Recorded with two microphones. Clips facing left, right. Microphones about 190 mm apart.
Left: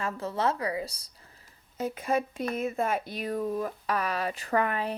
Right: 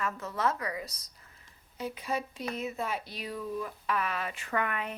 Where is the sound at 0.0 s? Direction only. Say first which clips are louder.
Left 3 dB; 30° left (ahead or behind).